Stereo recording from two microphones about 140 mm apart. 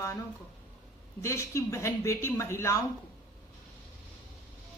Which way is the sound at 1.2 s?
20° left (ahead or behind).